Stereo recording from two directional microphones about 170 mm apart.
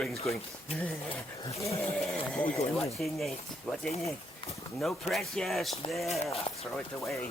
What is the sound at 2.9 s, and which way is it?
Speech, centre (ahead or behind).